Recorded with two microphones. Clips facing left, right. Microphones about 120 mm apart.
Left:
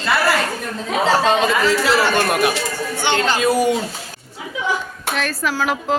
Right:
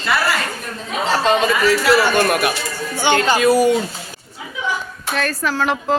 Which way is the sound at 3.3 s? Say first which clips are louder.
Right 4 dB; 20° left (ahead or behind).